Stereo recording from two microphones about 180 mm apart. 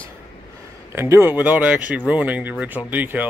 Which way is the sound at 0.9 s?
15° right (ahead or behind).